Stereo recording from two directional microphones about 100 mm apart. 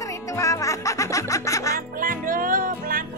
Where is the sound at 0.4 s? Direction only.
30° left (ahead or behind).